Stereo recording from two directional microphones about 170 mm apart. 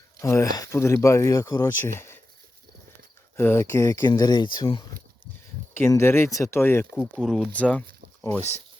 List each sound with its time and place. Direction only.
0.2 s speech: 15° left (ahead or behind)
2.0 s a sound: 15° left (ahead or behind)
3.3 s speech: 15° left (ahead or behind)
5.7 s speech: 15° left (ahead or behind)
7.2 s speech: 5° left (ahead or behind)